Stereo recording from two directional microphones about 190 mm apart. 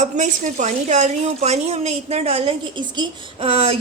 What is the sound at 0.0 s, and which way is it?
A woman's voice, 40° right (ahead or behind).